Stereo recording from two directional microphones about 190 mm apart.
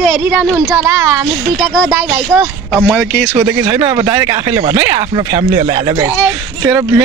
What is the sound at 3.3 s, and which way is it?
Speech, 20° right (ahead or behind).